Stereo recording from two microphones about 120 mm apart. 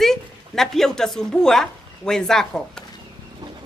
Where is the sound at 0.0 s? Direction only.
5° left (ahead or behind).